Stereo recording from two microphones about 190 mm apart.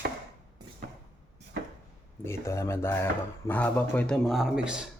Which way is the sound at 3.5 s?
10° left (ahead or behind).